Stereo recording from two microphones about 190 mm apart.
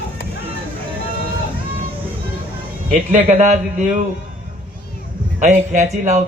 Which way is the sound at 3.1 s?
35° right (ahead or behind).